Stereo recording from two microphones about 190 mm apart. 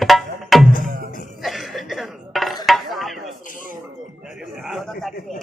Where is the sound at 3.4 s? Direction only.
45° left (ahead or behind).